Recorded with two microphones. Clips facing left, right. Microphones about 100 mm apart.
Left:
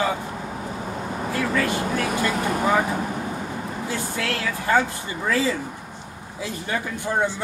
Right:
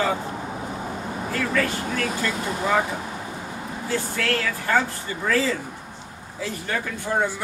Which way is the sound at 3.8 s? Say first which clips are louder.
Right 3 dB; 20° left (ahead or behind).